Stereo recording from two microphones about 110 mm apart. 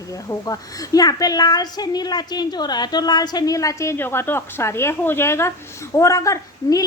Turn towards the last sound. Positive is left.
turn(degrees=30)  # may be behind; listen again after turning